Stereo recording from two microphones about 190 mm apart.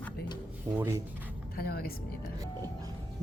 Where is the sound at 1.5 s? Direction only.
55° left (ahead or behind).